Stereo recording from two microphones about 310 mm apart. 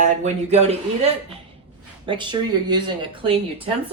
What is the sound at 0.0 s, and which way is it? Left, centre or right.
A man's voice, right.